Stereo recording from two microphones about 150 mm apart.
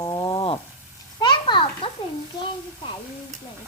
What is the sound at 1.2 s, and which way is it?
Children playing, 30° left (ahead or behind).